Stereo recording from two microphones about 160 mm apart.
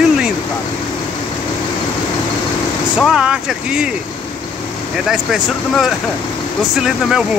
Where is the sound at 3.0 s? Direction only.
5° right (ahead or behind).